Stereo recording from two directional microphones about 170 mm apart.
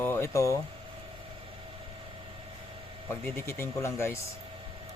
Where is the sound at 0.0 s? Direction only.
15° left (ahead or behind).